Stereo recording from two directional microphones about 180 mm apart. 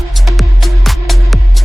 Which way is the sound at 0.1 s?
Centre (ahead or behind).